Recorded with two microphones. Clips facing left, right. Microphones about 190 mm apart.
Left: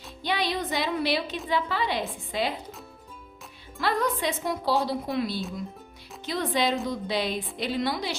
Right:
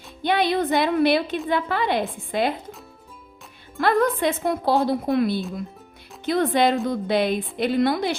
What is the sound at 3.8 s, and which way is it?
A woman's voice, 55° right (ahead or behind).